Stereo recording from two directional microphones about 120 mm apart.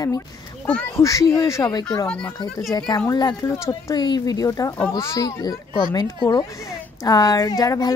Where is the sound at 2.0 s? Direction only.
10° left (ahead or behind).